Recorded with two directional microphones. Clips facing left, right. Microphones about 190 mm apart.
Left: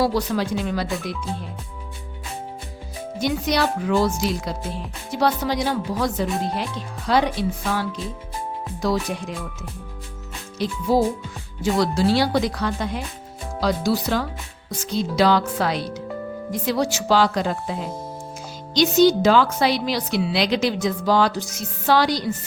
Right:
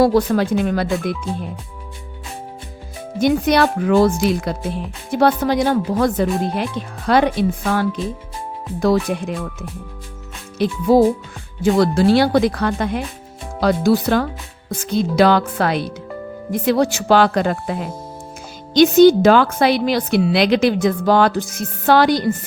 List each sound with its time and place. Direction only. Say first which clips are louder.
0.0 s speech: right 7 dB; 50° right (ahead or behind)
3.2 s a woman's voice: right 7 dB; 55° right (ahead or behind)